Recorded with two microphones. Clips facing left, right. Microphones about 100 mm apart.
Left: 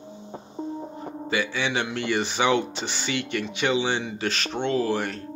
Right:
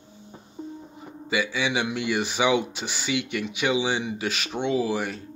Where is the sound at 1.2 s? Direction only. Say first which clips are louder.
Right 1 dB; 10° right (ahead or behind).